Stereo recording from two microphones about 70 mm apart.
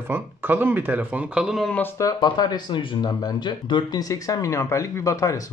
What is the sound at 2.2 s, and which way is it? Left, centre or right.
Speech, left.